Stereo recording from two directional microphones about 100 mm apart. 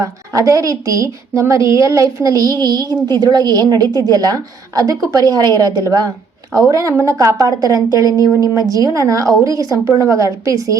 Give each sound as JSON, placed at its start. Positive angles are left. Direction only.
{"t": 0.0, "sound": "a woman's voice", "side_deg": -35}